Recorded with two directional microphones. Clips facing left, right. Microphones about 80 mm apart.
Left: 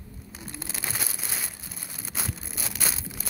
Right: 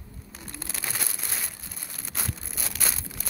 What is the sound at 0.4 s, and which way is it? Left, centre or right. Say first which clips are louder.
Crumpling: left 1 dB; centre.